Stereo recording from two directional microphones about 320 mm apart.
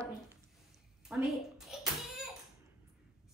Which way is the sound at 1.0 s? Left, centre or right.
Centre.